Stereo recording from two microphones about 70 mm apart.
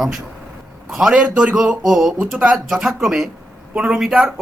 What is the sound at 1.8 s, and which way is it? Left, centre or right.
A man's voice, centre.